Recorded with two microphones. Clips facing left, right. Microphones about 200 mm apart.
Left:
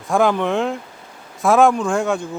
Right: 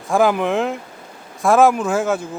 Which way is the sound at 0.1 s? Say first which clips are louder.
Right 1 dB; 5° right (ahead or behind).